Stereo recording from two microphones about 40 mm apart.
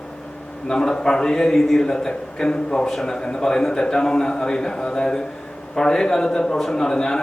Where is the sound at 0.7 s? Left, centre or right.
Centre.